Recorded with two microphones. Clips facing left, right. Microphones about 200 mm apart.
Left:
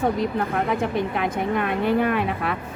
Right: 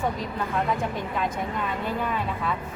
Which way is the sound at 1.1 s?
70° left (ahead or behind).